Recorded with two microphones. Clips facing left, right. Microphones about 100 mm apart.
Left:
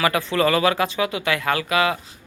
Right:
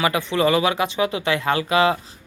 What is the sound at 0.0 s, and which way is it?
Speech, 20° right (ahead or behind).